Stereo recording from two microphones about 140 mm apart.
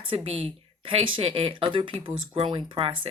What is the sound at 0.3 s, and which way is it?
Speech, 40° right (ahead or behind).